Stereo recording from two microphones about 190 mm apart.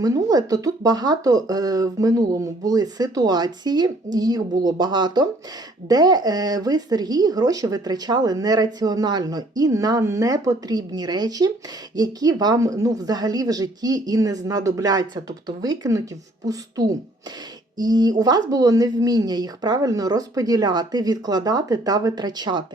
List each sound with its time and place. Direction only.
0.0 s speech: 20° right (ahead or behind)